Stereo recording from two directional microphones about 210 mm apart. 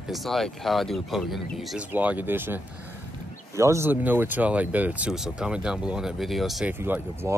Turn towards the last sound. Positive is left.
turn(degrees=-10)  # may be behind; listen again after turning